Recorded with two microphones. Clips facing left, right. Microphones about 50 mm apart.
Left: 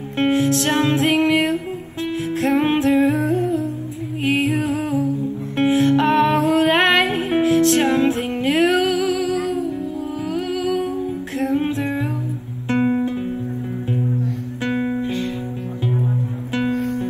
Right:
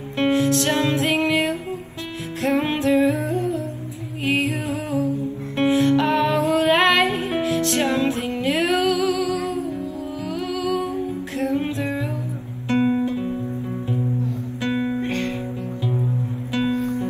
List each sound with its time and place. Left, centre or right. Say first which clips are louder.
0.2 s music: left 1 dB; left
10.3 s humming: left 2 dB; left
11.3 s music: left 3 dB; left
12.6 s guitar: left 1 dB; left
13.0 s music: left 1 dB; left
14.6 s guitar: left 1 dB; left
15.0 s music: left 1 dB; right
16.7 s music: left 1 dB; left